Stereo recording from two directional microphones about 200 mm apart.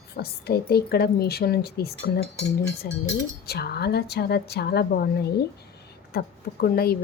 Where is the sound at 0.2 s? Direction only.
50° left (ahead or behind).